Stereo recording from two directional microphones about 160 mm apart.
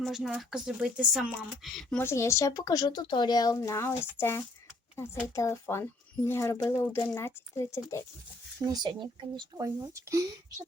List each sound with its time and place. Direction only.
0.0 s speech: centre (ahead or behind)
2.0 s speech: 15° left (ahead or behind)
8.6 s speech: 25° right (ahead or behind)